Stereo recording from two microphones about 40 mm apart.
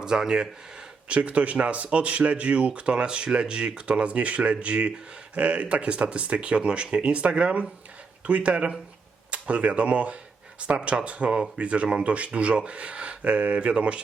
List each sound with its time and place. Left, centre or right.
0.0 s speech: centre
1.0 s speech: right